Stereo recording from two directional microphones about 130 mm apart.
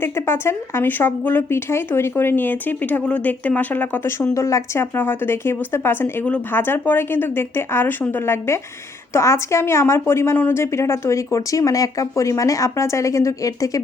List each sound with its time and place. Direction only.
0.0 s a woman's voice: 20° left (ahead or behind)